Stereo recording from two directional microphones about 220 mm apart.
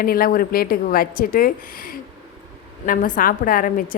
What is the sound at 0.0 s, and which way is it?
A woman's voice, 40° left (ahead or behind).